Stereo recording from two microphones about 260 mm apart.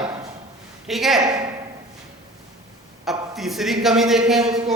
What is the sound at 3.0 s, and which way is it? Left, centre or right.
A man's voice, centre.